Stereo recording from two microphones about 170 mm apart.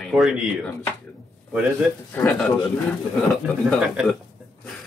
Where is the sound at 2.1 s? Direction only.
5° left (ahead or behind).